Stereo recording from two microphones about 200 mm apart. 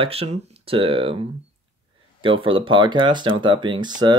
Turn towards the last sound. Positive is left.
turn(degrees=-20)  # may be behind; listen again after turning